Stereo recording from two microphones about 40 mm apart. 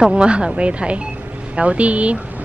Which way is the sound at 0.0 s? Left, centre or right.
Right.